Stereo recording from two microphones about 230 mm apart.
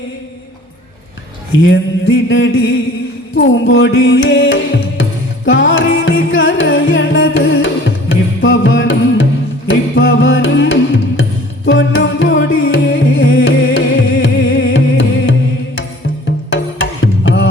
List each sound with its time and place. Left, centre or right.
1.6 s music: left